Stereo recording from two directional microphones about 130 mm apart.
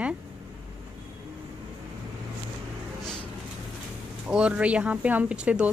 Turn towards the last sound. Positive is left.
turn(degrees=-10)  # may be behind; listen again after turning